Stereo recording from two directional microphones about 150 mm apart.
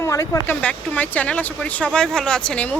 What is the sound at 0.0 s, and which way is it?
Speech, 20° left (ahead or behind).